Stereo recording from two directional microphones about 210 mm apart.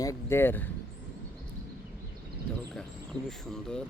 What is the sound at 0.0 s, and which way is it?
Speech, 15° left (ahead or behind).